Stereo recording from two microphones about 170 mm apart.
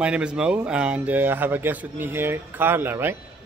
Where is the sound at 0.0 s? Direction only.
5° right (ahead or behind).